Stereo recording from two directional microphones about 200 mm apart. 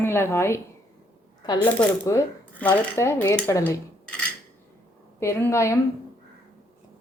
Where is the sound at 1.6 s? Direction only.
10° left (ahead or behind).